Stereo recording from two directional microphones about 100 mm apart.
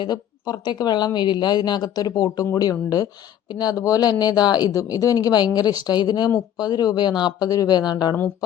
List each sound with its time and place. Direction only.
0.0 s speech: 45° left (ahead or behind)